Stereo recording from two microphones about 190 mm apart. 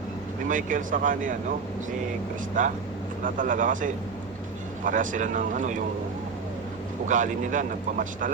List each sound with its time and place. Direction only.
0.4 s speech: 45° right (ahead or behind)
2.6 s speech: 45° right (ahead or behind)
7.1 s speech: 40° right (ahead or behind)